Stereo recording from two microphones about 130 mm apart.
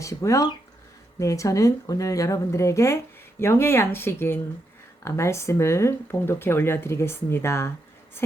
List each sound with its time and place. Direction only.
0.0 s speech: 25° left (ahead or behind)